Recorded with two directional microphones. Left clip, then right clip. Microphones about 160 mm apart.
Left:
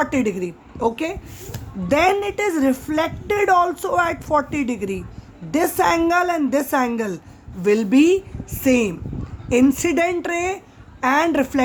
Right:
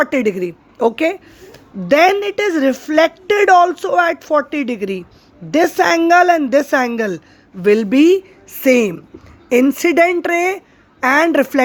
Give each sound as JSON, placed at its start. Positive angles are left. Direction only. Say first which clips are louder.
{"t": 0.0, "sound": "a woman's voice", "louder": "right 5 dB", "side_deg": -30}